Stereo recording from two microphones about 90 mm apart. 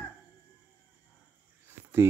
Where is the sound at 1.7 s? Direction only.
30° right (ahead or behind).